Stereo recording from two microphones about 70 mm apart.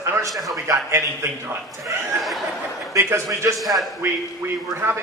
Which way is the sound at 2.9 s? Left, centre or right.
Right.